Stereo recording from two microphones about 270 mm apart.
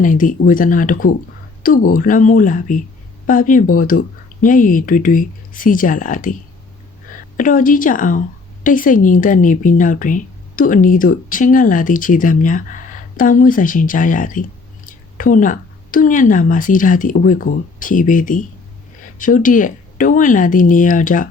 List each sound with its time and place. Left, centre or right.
0.0 s a woman's voice: left
7.3 s a woman's voice: left